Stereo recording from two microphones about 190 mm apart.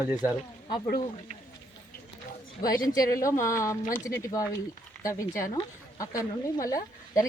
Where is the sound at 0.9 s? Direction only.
45° left (ahead or behind).